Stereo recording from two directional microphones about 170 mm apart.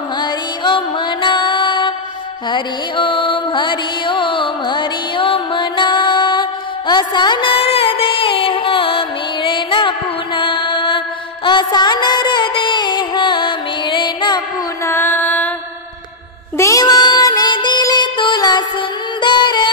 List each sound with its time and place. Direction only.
0.2 s music: 30° left (ahead or behind)
14.9 s music: 10° left (ahead or behind)
16.5 s music: 20° left (ahead or behind)